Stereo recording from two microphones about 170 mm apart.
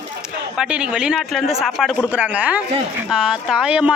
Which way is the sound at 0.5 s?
5° right (ahead or behind).